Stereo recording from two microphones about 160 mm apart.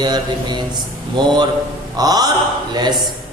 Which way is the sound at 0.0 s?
25° right (ahead or behind).